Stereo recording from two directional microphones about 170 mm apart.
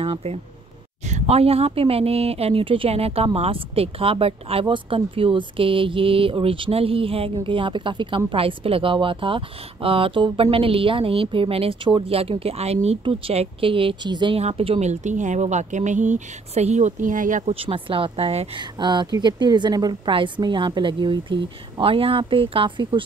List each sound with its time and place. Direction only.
0.0 s a woman's voice: 35° right (ahead or behind)
18.6 s a woman's voice: 25° right (ahead or behind)